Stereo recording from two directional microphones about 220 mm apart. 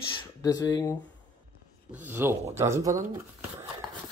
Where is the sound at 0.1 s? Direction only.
15° left (ahead or behind).